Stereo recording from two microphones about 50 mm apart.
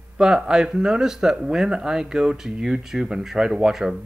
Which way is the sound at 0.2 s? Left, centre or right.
Centre.